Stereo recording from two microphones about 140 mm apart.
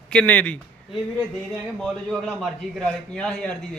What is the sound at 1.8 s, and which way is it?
A man's voice, 5° left (ahead or behind).